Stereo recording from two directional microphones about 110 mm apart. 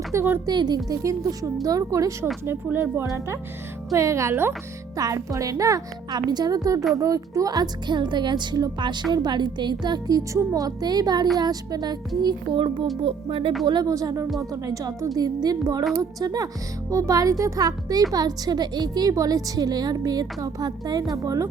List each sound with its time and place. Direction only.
0.1 s speech: 20° right (ahead or behind)
0.4 s a woman's voice: 40° right (ahead or behind)
2.4 s speech: 20° right (ahead or behind)
4.9 s a woman's voice: 35° right (ahead or behind)
12.2 s a child's voice: 50° right (ahead or behind)
13.7 s a woman's voice: 40° right (ahead or behind)